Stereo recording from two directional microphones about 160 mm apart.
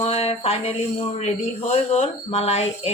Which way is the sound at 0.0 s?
40° left (ahead or behind).